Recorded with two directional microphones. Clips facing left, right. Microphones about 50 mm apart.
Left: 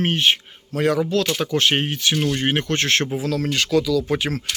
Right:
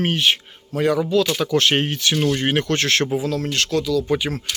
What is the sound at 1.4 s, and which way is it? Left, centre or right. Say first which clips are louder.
Speech: right 2 dB; left.